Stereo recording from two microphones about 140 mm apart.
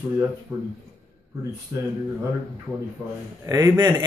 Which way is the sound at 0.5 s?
25° right (ahead or behind).